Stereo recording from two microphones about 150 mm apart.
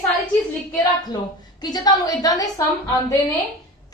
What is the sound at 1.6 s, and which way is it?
A woman's voice, 25° left (ahead or behind).